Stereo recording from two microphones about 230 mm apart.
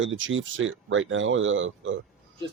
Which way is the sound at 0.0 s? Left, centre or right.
Right.